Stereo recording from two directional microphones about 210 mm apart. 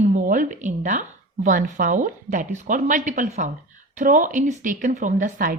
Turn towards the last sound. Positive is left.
turn(degrees=-40)  # may be behind; listen again after turning